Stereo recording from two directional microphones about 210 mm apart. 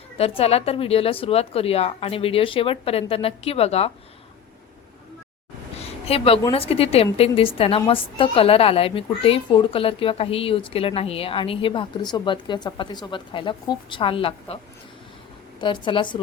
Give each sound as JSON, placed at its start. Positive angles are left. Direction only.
{"t": 0.2, "sound": "a woman's voice", "side_deg": 30}
{"t": 5.8, "sound": "a sound", "side_deg": 30}
{"t": 6.5, "sound": "a woman's voice", "side_deg": 25}
{"t": 15.6, "sound": "a woman's voice", "side_deg": 20}